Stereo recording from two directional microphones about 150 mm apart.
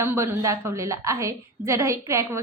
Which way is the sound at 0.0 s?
15° right (ahead or behind).